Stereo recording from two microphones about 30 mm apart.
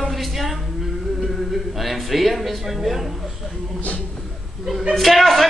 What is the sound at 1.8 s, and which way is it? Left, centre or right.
A man's voice, centre.